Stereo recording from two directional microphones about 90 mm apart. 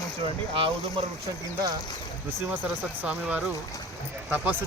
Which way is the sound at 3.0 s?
15° right (ahead or behind).